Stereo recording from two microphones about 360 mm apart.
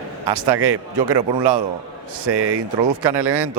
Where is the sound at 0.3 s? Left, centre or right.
Right.